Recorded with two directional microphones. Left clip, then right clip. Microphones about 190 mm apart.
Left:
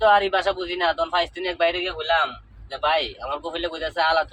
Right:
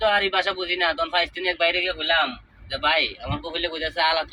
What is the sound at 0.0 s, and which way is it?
Speech, 25° left (ahead or behind).